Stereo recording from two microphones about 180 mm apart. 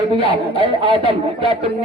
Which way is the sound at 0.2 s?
30° left (ahead or behind).